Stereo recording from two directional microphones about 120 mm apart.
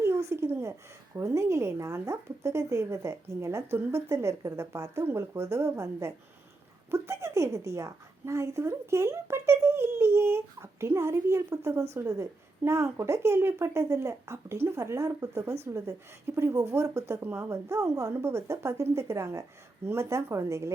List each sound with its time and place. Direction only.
0.0 s a woman's voice: 20° right (ahead or behind)